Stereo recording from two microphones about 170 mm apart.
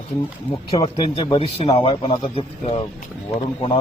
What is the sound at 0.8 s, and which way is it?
Speech, 30° left (ahead or behind).